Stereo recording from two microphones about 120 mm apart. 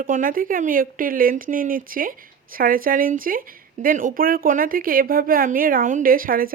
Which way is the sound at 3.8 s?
85° right.